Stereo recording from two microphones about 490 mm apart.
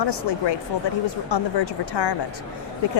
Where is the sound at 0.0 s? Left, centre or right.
Left.